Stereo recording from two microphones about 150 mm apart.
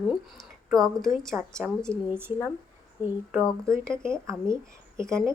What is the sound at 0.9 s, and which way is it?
Speech, centre (ahead or behind).